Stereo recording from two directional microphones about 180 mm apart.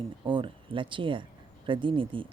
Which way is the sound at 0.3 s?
25° right (ahead or behind).